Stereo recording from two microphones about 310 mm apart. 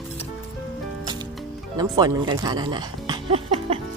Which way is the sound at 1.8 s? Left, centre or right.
Centre.